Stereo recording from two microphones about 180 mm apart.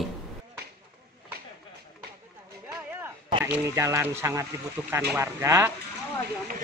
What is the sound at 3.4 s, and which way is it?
Speech, 10° right (ahead or behind).